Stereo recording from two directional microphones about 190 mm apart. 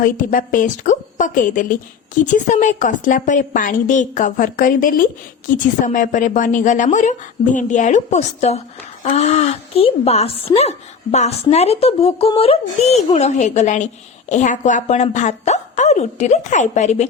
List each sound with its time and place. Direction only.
0.0 s a woman's voice: 45° left (ahead or behind)